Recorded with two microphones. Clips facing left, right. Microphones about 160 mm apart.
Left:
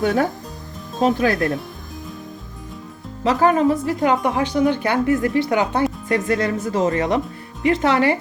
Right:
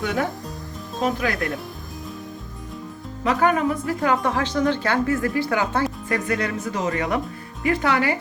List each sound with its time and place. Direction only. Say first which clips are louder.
0.0 s speech: left 6 dB; 40° left (ahead or behind)
1.0 s speech: left 6 dB; 30° left (ahead or behind)
3.2 s speech: left 4 dB; 30° left (ahead or behind)